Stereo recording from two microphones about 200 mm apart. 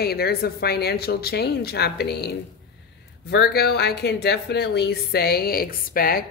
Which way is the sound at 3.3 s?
55° left (ahead or behind).